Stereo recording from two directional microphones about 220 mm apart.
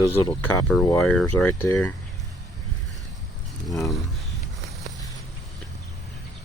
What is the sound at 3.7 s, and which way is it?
Speech, centre (ahead or behind).